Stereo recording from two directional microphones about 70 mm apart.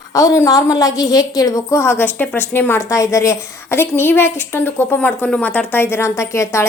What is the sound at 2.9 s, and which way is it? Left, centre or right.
A woman's voice, left.